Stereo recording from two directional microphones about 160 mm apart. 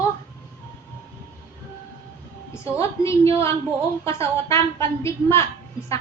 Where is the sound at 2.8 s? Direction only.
15° left (ahead or behind).